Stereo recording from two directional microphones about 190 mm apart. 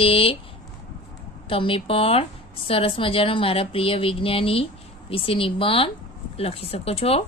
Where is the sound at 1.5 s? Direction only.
30° left (ahead or behind).